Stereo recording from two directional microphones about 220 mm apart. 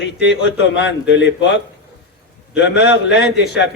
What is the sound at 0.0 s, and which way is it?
A man's voice, 50° left (ahead or behind).